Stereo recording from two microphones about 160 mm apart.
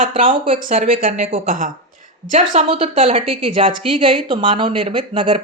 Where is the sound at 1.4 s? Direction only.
60° right (ahead or behind).